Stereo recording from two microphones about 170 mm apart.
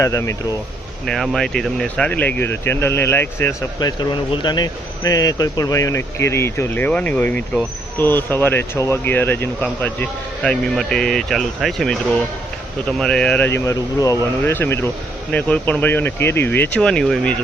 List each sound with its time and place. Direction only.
0.0 s speech: 20° left (ahead or behind)
1.0 s speech: centre (ahead or behind)